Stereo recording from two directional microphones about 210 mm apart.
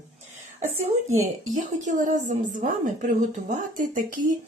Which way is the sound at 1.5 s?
35° right (ahead or behind).